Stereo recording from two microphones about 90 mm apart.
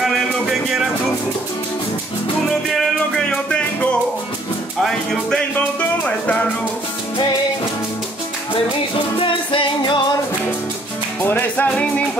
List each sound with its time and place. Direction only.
0.0 s a sound: 5° right (ahead or behind)
2.7 s music: 5° left (ahead or behind)
5.6 s music: 15° left (ahead or behind)
9.2 s music: 75° left (ahead or behind)
11.2 s music: 20° left (ahead or behind)